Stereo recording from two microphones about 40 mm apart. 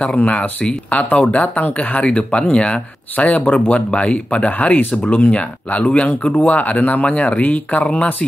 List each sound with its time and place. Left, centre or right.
0.0 s speech: left